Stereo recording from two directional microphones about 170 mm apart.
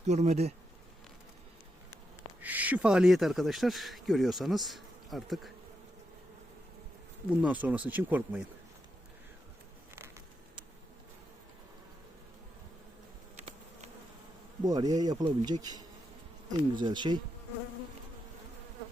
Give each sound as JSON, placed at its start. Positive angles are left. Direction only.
{"t": 0.0, "sound": "speech", "side_deg": -40}
{"t": 2.4, "sound": "speech", "side_deg": -10}
{"t": 7.3, "sound": "speech", "side_deg": -5}
{"t": 9.9, "sound": "a sound", "side_deg": -15}
{"t": 13.3, "sound": "bee", "side_deg": -40}
{"t": 14.6, "sound": "speech", "side_deg": -25}